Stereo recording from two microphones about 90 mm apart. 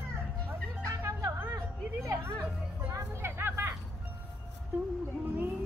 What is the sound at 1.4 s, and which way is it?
Music, 30° right (ahead or behind).